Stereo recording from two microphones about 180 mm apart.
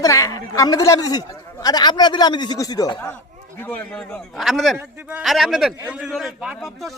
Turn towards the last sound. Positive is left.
turn(degrees=-5)  # may be behind; listen again after turning